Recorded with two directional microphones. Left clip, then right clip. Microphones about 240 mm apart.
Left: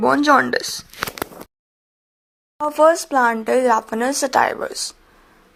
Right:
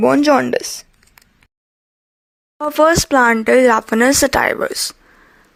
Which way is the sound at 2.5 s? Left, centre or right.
Right.